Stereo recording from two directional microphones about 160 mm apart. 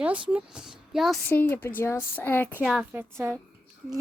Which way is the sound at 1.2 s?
10° left (ahead or behind).